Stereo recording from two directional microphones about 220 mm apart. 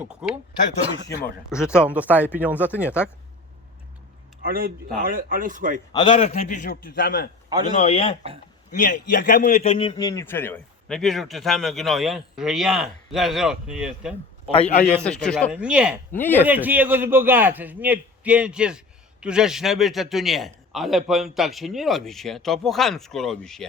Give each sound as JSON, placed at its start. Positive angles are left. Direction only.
{"t": 0.0, "sound": "a man's voice", "side_deg": -5}
{"t": 1.8, "sound": "a man's voice", "side_deg": -5}
{"t": 4.4, "sound": "a man's voice", "side_deg": -40}
{"t": 5.9, "sound": "a man's voice", "side_deg": 25}
{"t": 7.7, "sound": "a man's voice", "side_deg": 30}
{"t": 14.5, "sound": "speech", "side_deg": 25}
{"t": 15.0, "sound": "a man's voice", "side_deg": 5}
{"t": 16.1, "sound": "speech", "side_deg": 10}
{"t": 16.4, "sound": "a man's voice", "side_deg": -10}